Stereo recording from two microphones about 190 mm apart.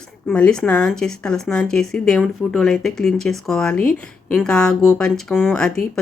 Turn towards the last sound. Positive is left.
turn(degrees=5)  # may be behind; listen again after turning